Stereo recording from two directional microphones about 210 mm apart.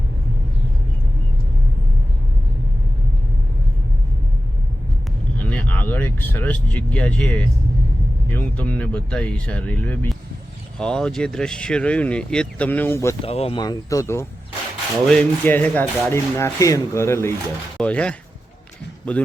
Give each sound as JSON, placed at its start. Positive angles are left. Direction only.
{"t": 5.4, "sound": "speech", "side_deg": 5}
{"t": 13.2, "sound": "speech", "side_deg": 30}